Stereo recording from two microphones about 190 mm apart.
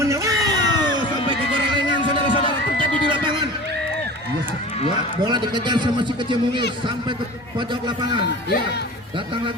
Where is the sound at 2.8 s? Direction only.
25° right (ahead or behind).